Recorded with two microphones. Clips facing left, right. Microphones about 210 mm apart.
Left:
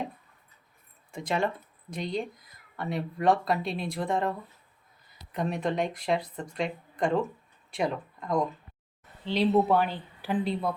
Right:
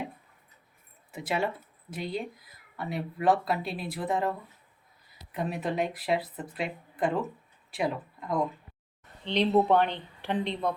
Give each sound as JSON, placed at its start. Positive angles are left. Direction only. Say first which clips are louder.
{"t": 1.1, "sound": "speech", "louder": "left 1 dB", "side_deg": -5}
{"t": 5.3, "sound": "speech", "louder": "left 2 dB", "side_deg": -5}